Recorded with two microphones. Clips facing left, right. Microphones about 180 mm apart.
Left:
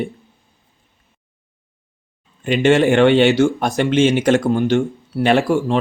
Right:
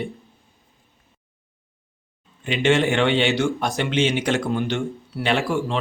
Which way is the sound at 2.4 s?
45° left (ahead or behind).